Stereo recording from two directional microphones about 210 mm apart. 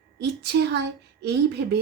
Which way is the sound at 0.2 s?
50° right (ahead or behind).